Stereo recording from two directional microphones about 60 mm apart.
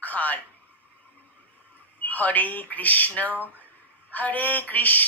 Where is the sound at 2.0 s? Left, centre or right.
Left.